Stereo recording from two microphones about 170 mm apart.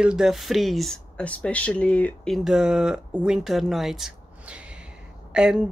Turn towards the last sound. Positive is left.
turn(degrees=-5)  # may be behind; listen again after turning